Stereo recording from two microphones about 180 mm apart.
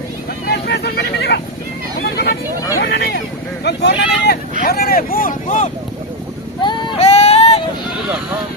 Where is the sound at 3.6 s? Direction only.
70° left (ahead or behind).